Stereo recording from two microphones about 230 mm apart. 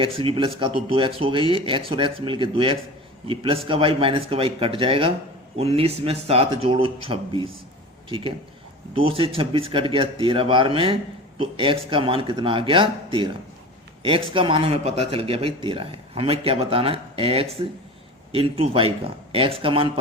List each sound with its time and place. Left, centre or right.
0.0 s speech: right
9.0 s speech: right